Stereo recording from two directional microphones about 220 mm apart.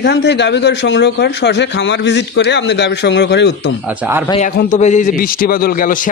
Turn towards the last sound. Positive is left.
turn(degrees=40)  # may be behind; listen again after turning